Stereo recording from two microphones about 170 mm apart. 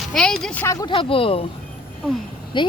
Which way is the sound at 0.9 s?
30° left (ahead or behind).